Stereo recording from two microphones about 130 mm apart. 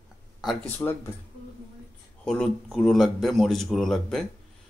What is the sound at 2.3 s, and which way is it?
Speech, 5° left (ahead or behind).